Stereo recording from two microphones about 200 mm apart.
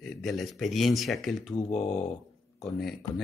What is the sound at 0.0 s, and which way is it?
Speech, centre (ahead or behind).